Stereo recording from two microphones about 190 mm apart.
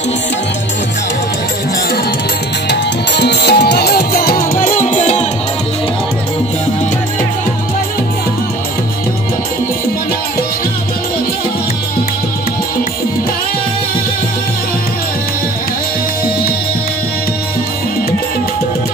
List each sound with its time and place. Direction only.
2.7 s music: 60° left (ahead or behind); by 5.2 s 35° left (ahead or behind)